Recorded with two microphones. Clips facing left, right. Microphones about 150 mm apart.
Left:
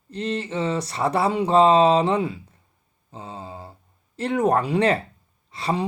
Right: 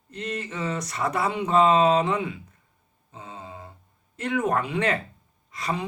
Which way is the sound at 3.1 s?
30° left (ahead or behind).